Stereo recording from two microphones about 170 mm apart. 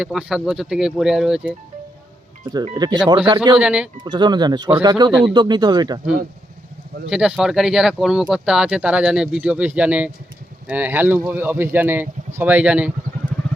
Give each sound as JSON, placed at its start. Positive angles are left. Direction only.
{"t": 0.0, "sound": "speech", "side_deg": -5}
{"t": 2.7, "sound": "speech", "side_deg": -25}
{"t": 3.6, "sound": "speech", "side_deg": -5}
{"t": 4.0, "sound": "speech", "side_deg": -25}
{"t": 7.1, "sound": "speech", "side_deg": -5}